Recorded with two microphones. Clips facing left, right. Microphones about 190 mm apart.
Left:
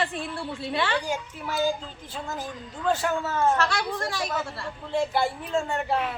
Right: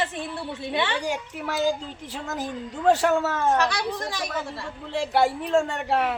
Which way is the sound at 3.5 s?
20° right (ahead or behind).